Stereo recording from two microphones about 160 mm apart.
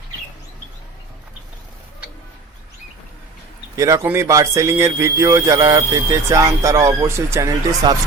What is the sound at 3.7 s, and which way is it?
Speech, 20° right (ahead or behind).